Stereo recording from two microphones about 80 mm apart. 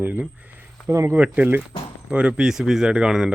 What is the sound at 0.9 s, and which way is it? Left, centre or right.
Speech, right.